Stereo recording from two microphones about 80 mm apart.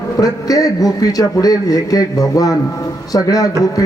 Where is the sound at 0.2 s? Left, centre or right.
Left.